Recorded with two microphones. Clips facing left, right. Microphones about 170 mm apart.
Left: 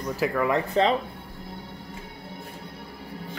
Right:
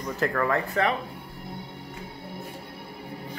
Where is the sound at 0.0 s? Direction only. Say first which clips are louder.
Left 1 dB; 5° left (ahead or behind).